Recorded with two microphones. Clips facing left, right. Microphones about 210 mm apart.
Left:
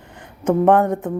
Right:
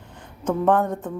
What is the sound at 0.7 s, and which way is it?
Speech, 65° left (ahead or behind).